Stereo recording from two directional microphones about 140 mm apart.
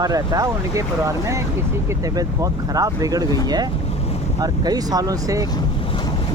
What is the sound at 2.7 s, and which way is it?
Speech, 25° right (ahead or behind).